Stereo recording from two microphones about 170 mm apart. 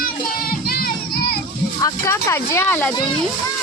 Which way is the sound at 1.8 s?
20° left (ahead or behind).